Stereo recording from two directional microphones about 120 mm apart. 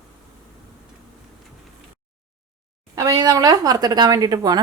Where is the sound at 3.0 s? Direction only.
35° right (ahead or behind).